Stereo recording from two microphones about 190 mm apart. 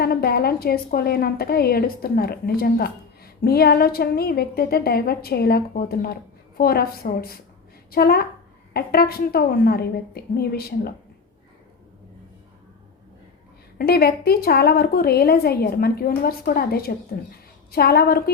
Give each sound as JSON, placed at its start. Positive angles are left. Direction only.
{"t": 0.0, "sound": "a woman's voice", "side_deg": 55}
{"t": 13.7, "sound": "a woman's voice", "side_deg": 55}